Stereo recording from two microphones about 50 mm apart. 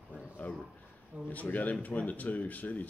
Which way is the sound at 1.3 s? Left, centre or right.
Left.